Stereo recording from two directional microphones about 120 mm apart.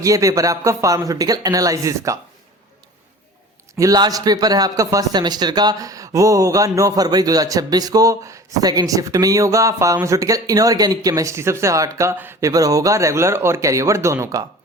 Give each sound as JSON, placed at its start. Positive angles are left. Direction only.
{"t": 0.0, "sound": "speech", "side_deg": -25}
{"t": 3.8, "sound": "speech", "side_deg": -30}